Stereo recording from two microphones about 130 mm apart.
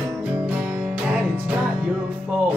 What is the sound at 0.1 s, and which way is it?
Music, 10° right (ahead or behind).